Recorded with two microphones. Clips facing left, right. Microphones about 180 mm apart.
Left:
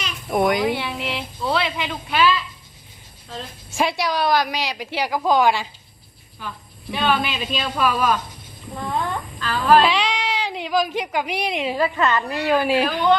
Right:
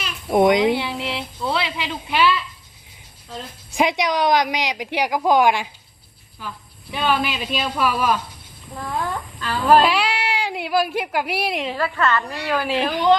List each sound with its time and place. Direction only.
0.3 s speech: 20° right (ahead or behind)
1.4 s a woman's voice: centre (ahead or behind)
2.0 s a woman's voice: 15° right (ahead or behind)
3.3 s a woman's voice: 15° right (ahead or behind)
6.9 s a woman's voice: 5° right (ahead or behind)
8.9 s fowl: 5° right (ahead or behind)
9.4 s a woman's voice: 20° right (ahead or behind)
9.8 s a woman's voice: 5° right (ahead or behind)
11.6 s a woman's voice: 15° left (ahead or behind)